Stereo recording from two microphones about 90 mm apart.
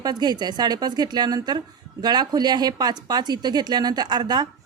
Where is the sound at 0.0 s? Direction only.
50° right (ahead or behind).